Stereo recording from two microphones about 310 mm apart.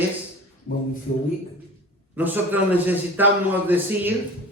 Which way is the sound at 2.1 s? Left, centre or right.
Centre.